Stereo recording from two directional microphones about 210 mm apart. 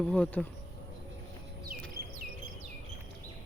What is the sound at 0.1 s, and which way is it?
Speech, 5° left (ahead or behind).